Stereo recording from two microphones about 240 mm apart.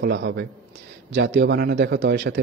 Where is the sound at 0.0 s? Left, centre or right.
Right.